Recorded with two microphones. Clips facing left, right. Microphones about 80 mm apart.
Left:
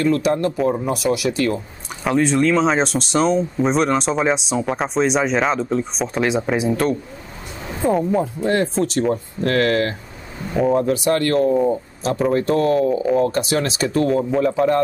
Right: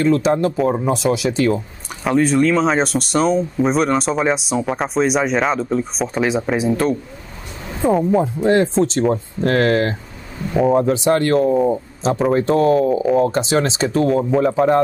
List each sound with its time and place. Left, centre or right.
0.0 s speech: centre
0.9 s speech: right
2.0 s speech: centre
8.2 s speech: right
10.5 s speech: centre
10.8 s speech: centre
12.6 s speech: centre
13.3 s speech: right
13.9 s speech: centre